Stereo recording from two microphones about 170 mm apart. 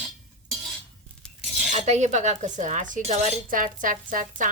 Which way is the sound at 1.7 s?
45° right (ahead or behind).